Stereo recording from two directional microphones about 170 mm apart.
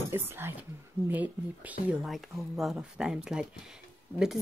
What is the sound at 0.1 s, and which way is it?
Speech, 15° right (ahead or behind).